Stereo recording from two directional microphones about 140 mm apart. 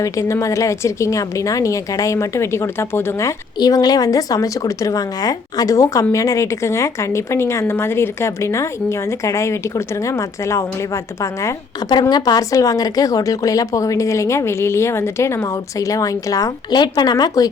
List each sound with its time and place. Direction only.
0.0 s a woman's voice: 20° left (ahead or behind)